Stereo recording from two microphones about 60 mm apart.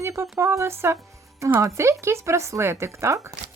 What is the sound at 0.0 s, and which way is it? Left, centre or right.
Speech, right.